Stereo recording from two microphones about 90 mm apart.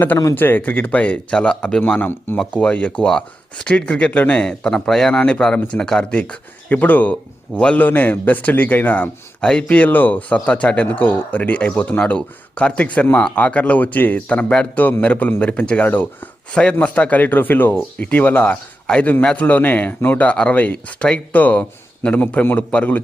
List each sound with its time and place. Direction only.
0.3 s a man's voice: 20° left (ahead or behind)